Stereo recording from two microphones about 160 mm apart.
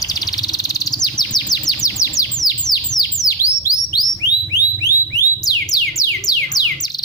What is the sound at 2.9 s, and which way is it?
Bird, 20° left (ahead or behind).